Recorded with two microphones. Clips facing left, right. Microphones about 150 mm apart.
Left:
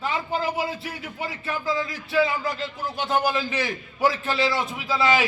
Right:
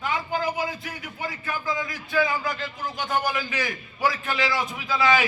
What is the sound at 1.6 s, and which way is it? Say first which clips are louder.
A man's voice: left 5 dB; 25° left (ahead or behind).